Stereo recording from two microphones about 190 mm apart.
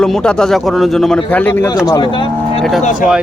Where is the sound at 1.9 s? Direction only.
25° left (ahead or behind).